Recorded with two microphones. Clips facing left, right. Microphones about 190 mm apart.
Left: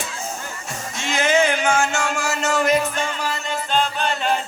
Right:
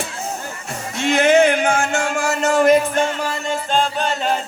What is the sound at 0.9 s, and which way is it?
Music, 60° right (ahead or behind).